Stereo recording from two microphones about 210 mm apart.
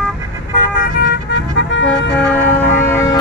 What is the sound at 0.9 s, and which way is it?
Vehicle, 50° left (ahead or behind).